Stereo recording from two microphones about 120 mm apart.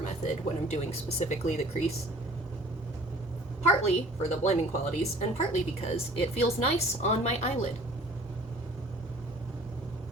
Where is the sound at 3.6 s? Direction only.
70° left (ahead or behind).